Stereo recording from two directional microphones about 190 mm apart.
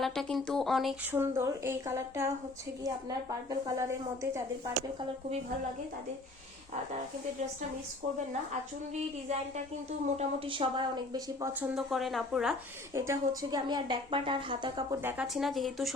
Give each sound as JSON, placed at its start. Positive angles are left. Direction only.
{"t": 0.0, "sound": "speech", "side_deg": 0}
{"t": 1.1, "sound": "a woman's voice", "side_deg": -15}
{"t": 10.2, "sound": "a woman's voice", "side_deg": -25}
{"t": 11.7, "sound": "speech", "side_deg": 0}
{"t": 12.9, "sound": "a woman's voice", "side_deg": -15}
{"t": 15.0, "sound": "speech", "side_deg": -5}